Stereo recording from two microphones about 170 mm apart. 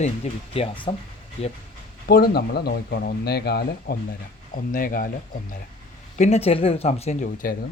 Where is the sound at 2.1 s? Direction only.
65° left (ahead or behind).